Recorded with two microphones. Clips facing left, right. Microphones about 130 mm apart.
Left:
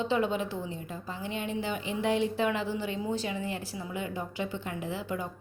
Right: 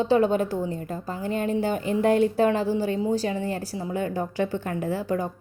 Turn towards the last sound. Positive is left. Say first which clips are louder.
# right 8 dB
turn(degrees=-40)  # may be behind; listen again after turning